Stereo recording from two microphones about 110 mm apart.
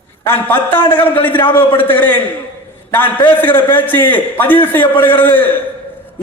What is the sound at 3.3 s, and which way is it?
A man's voice, 20° left (ahead or behind).